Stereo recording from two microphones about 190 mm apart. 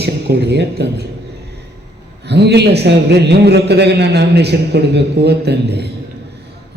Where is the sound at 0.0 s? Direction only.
60° right (ahead or behind).